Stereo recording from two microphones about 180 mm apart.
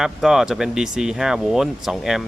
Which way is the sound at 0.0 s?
Centre (ahead or behind).